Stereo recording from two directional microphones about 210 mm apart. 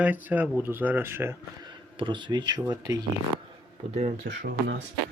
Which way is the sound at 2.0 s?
20° right (ahead or behind).